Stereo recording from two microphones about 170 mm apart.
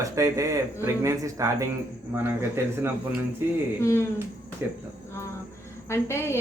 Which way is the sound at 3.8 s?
15° left (ahead or behind).